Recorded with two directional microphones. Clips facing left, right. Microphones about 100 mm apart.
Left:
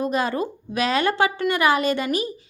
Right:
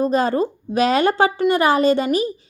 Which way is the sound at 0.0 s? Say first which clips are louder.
Right 5 dB; 35° right (ahead or behind).